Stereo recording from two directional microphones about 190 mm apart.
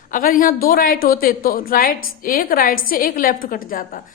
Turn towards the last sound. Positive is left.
turn(degrees=45)  # may be behind; listen again after turning